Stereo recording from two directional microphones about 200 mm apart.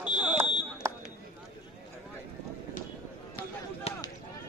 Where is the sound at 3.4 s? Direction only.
25° left (ahead or behind).